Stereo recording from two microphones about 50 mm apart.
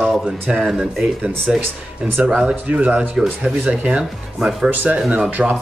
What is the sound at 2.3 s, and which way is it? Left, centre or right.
Speech, centre.